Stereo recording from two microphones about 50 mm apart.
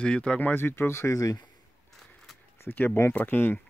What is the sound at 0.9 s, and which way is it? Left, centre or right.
Speech, left.